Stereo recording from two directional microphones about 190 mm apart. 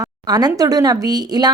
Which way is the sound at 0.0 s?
20° right (ahead or behind).